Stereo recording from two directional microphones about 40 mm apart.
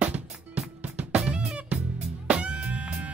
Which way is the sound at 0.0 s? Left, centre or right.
Right.